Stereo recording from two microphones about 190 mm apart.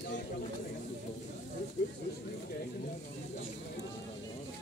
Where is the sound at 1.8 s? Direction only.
65° left (ahead or behind).